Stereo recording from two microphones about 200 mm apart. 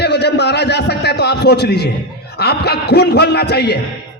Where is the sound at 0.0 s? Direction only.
55° left (ahead or behind).